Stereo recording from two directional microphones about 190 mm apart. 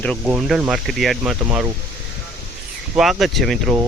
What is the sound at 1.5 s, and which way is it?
Speech, 15° right (ahead or behind).